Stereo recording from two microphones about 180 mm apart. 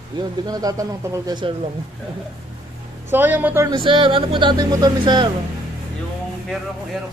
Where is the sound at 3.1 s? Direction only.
10° right (ahead or behind).